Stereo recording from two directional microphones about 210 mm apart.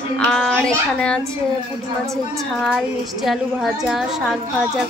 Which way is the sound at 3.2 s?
Centre (ahead or behind).